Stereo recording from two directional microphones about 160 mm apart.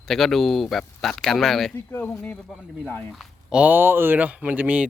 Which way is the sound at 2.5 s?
Centre (ahead or behind).